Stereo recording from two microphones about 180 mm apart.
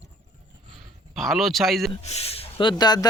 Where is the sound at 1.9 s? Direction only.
35° left (ahead or behind).